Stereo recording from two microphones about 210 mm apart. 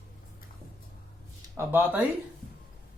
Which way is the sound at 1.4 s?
10° right (ahead or behind).